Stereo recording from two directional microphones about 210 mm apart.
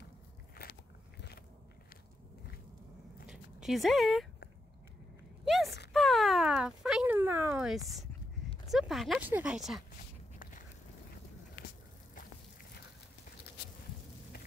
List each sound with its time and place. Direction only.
0.6 s biting: 45° left (ahead or behind)
3.3 s dog: centre (ahead or behind)
5.4 s a sound: centre (ahead or behind)
8.6 s speech: centre (ahead or behind)